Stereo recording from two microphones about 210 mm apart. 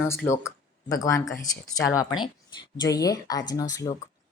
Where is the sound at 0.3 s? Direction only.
15° left (ahead or behind).